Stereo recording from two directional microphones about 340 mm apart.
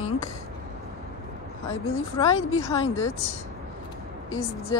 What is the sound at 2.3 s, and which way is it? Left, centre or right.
Speech, left.